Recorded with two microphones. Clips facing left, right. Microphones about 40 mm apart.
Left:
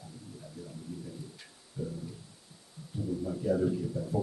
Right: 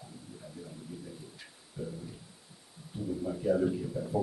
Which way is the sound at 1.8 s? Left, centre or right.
Centre.